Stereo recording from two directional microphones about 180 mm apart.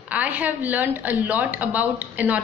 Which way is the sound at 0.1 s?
10° right (ahead or behind).